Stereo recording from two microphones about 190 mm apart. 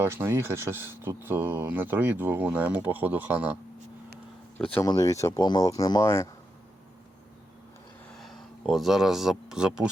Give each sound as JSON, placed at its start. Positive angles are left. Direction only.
{"t": 0.0, "sound": "speech", "side_deg": -15}
{"t": 4.5, "sound": "speech", "side_deg": 10}
{"t": 8.2, "sound": "speech", "side_deg": 0}